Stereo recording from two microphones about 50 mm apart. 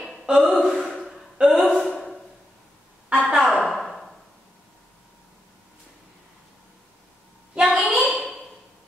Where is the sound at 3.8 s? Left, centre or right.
Centre.